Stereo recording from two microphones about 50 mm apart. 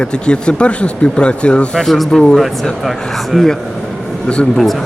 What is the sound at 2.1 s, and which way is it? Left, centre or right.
Speech, centre.